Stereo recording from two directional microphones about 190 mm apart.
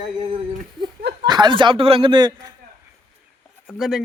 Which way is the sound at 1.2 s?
20° right (ahead or behind).